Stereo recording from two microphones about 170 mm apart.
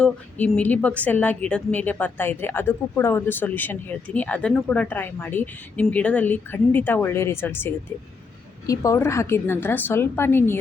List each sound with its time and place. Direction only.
0.0 s a woman's voice: 10° left (ahead or behind)